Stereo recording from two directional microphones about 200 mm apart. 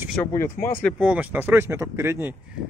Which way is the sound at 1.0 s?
5° right (ahead or behind).